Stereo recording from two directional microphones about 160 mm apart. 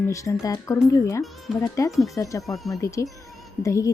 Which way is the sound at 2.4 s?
Centre (ahead or behind).